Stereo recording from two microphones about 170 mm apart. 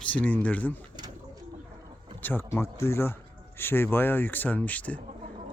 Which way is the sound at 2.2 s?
15° left (ahead or behind).